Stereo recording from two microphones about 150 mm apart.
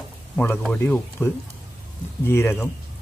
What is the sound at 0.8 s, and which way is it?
Speech, 15° left (ahead or behind).